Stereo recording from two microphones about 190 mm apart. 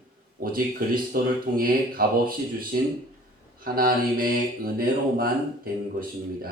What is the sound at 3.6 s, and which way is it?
Speech, 50° right (ahead or behind).